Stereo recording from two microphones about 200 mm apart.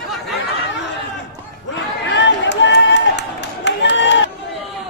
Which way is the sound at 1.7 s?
65° left (ahead or behind).